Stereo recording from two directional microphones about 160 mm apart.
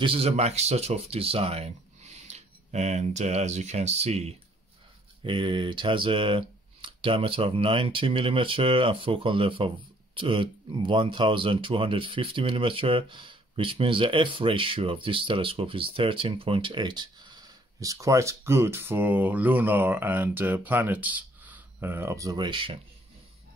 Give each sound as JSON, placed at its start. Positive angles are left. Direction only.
{"t": 0.0, "sound": "speech", "side_deg": -35}